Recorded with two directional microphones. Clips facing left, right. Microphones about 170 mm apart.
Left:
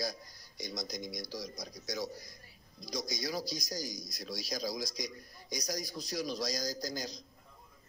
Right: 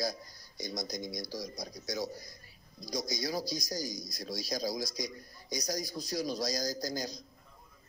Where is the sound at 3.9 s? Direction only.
30° right (ahead or behind).